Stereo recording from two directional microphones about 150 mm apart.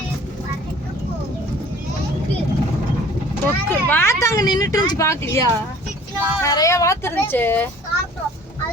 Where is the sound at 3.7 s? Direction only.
10° left (ahead or behind).